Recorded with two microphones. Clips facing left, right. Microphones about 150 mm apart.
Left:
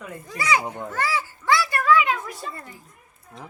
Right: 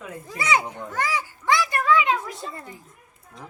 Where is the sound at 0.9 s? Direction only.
15° right (ahead or behind).